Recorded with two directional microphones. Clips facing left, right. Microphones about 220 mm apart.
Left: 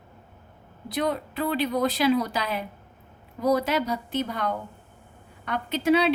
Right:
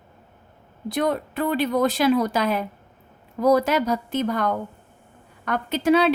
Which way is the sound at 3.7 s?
45° right (ahead or behind).